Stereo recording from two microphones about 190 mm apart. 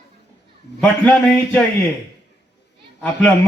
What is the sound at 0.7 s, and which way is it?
Speech, 5° left (ahead or behind).